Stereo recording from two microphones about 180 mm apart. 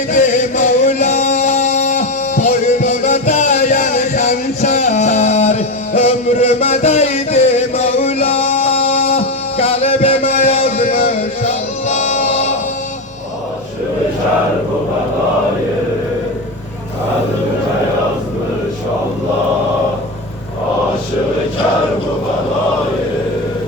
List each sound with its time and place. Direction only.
0.1 s music: 40° left (ahead or behind)
4.8 s music: 40° left (ahead or behind)
9.1 s a sound: 35° left (ahead or behind)
11.0 s music: 40° left (ahead or behind)